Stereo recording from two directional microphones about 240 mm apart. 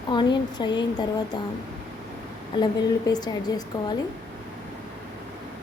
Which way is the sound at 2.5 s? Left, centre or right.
Centre.